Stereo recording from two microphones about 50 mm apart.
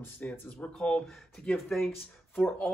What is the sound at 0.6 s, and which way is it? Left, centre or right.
Speech, centre.